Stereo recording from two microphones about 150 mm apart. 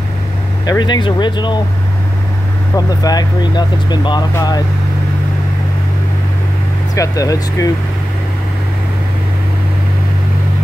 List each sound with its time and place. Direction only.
0.7 s speech: 30° left (ahead or behind)
2.7 s speech: 25° left (ahead or behind)
7.0 s speech: 25° left (ahead or behind)